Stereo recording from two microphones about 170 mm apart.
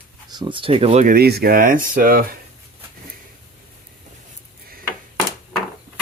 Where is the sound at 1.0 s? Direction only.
65° right (ahead or behind).